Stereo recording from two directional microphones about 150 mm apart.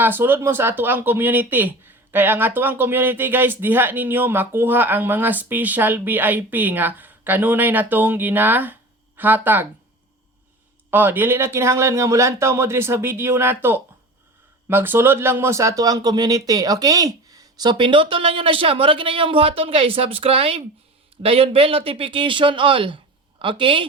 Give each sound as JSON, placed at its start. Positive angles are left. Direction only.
{"t": 0.0, "sound": "speech", "side_deg": -15}
{"t": 10.9, "sound": "speech", "side_deg": -10}